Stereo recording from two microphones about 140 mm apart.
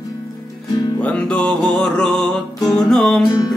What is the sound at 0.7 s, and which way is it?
Music, 25° left (ahead or behind).